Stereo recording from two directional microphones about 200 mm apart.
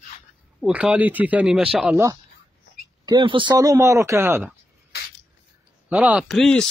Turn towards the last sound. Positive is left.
turn(degrees=0)  # may be behind; listen again after turning